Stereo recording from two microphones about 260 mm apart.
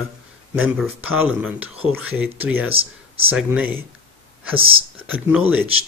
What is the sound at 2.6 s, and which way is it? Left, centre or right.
Speech, right.